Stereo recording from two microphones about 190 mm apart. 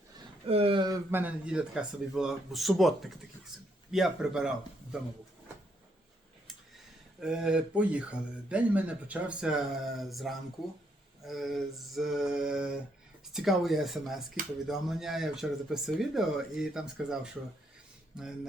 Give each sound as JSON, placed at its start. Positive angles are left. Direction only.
{"t": 0.4, "sound": "speech", "side_deg": -30}
{"t": 1.1, "sound": "speech", "side_deg": -5}
{"t": 7.2, "sound": "speech", "side_deg": -5}